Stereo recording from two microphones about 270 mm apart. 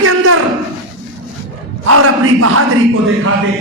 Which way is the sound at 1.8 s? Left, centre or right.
Right.